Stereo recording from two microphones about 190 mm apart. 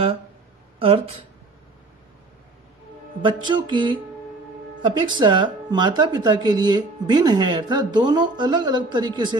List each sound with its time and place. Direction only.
0.7 s speech: 30° right (ahead or behind)
3.2 s speech: 25° right (ahead or behind)